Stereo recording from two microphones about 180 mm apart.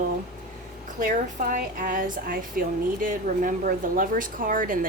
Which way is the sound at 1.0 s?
50° right (ahead or behind).